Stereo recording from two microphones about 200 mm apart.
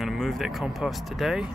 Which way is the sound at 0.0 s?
Centre (ahead or behind).